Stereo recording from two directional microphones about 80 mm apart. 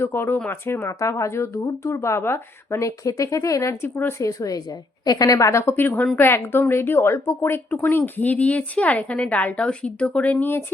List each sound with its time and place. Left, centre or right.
0.0 s a woman's voice: left
4.2 s a woman's voice: left; by 10.3 s centre